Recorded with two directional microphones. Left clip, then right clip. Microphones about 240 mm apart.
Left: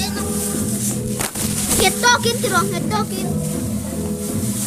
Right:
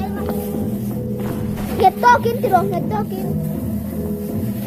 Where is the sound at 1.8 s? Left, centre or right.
Centre.